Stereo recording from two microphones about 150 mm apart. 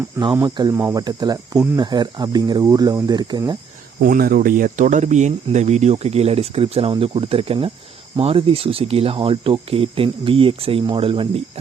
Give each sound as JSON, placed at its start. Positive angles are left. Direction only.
{"t": 0.4, "sound": "speech", "side_deg": -30}
{"t": 0.8, "sound": "speech", "side_deg": -15}
{"t": 1.0, "sound": "speech", "side_deg": -25}
{"t": 4.0, "sound": "speech", "side_deg": -75}